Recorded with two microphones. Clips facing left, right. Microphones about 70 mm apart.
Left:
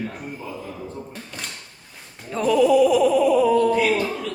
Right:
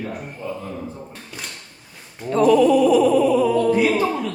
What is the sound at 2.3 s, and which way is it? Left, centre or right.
Speech, centre.